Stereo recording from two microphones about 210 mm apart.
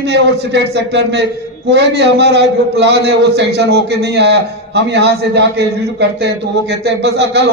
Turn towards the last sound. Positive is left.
turn(degrees=-55)  # may be behind; listen again after turning